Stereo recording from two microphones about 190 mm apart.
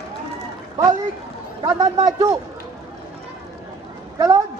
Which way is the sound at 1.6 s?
20° right (ahead or behind).